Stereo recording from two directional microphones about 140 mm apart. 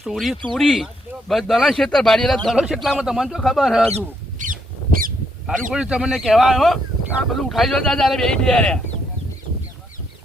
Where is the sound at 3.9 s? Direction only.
65° right (ahead or behind); by 5.1 s 90° right.